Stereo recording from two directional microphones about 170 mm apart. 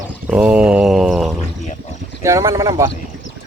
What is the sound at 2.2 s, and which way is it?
Speech, 15° right (ahead or behind).